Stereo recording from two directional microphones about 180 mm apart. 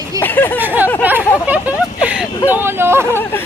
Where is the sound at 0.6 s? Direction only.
10° right (ahead or behind).